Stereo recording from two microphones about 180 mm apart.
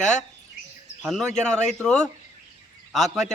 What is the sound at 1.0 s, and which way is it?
A man's voice, centre (ahead or behind).